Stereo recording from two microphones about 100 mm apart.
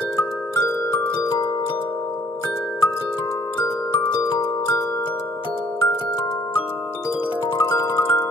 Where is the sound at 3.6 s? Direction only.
40° left (ahead or behind).